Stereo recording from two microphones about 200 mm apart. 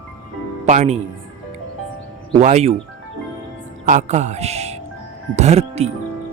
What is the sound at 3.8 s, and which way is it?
Speech, 35° right (ahead or behind).